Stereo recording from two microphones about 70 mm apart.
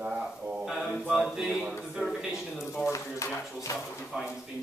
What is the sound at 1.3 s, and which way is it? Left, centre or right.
Speech, centre.